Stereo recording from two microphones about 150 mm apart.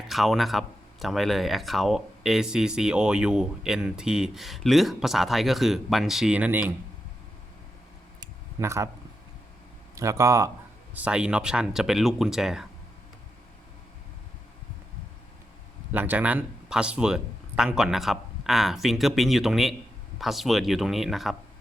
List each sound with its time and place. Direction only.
0.1 s speech: centre (ahead or behind)
8.2 s a sound: 20° right (ahead or behind)
9.9 s speech: 20° right (ahead or behind)
10.9 s speech: 5° right (ahead or behind)
15.9 s speech: 10° right (ahead or behind)